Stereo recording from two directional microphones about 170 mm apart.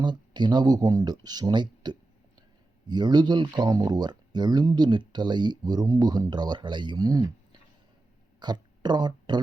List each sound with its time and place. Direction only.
0.0 s speech: 25° right (ahead or behind)
8.4 s speech: 25° right (ahead or behind)